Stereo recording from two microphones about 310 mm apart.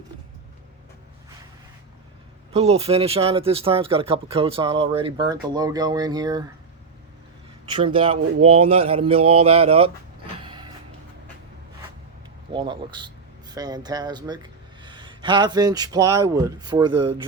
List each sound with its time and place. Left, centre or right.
2.5 s speech: centre
7.6 s speech: centre
10.4 s vehicle: centre
12.5 s speech: centre